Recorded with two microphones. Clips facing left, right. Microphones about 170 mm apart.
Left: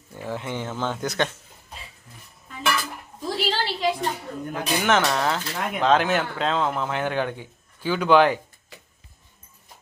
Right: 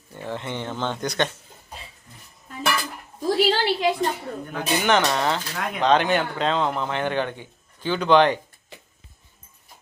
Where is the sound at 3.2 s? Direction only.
45° right (ahead or behind).